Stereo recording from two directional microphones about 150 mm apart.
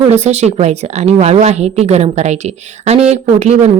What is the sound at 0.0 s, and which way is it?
Speech, 50° right (ahead or behind).